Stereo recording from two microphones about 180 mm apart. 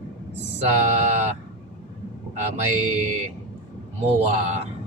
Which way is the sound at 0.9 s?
35° right (ahead or behind).